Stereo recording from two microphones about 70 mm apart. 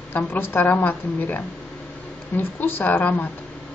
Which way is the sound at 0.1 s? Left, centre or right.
Left.